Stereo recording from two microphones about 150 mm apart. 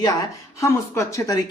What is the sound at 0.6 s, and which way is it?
Speech, 20° left (ahead or behind).